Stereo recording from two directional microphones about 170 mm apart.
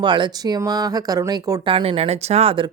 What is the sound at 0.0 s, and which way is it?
Speech, 25° right (ahead or behind).